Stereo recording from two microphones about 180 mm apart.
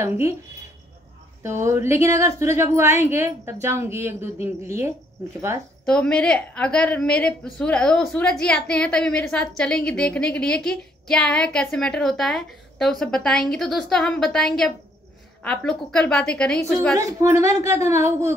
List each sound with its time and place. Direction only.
1.4 s a woman's voice: 15° right (ahead or behind)
5.9 s a woman's voice: 5° left (ahead or behind)
16.9 s a woman's voice: 15° right (ahead or behind)